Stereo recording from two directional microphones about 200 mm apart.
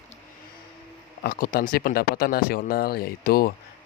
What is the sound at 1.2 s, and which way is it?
Speech, 45° left (ahead or behind).